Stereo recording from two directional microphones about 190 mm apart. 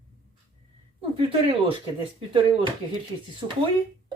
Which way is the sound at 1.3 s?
30° right (ahead or behind).